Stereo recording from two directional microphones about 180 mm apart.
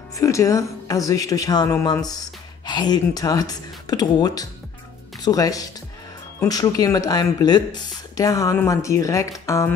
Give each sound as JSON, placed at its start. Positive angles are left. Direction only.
{"t": 0.2, "sound": "speech", "side_deg": 15}